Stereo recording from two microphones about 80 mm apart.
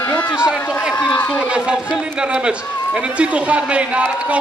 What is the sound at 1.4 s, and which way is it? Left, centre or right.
A man's voice, centre.